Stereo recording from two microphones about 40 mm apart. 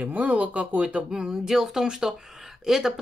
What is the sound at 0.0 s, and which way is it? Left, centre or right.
Speech, right.